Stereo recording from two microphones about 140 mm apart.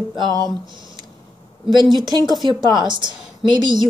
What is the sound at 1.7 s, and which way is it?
A woman's voice, 30° right (ahead or behind).